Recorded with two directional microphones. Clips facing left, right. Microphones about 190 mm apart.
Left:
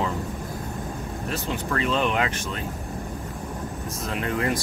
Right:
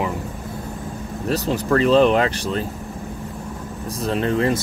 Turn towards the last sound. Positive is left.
turn(degrees=-30)  # may be behind; listen again after turning